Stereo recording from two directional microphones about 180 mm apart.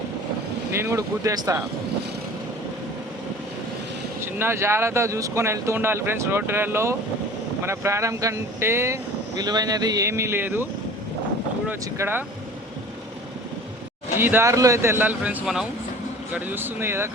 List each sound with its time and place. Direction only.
0.7 s speech: 15° right (ahead or behind)
4.2 s speech: 15° right (ahead or behind)
11.7 s speech: 10° right (ahead or behind)
14.2 s speech: 10° right (ahead or behind)